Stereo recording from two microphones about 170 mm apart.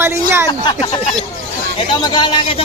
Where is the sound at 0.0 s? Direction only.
15° right (ahead or behind).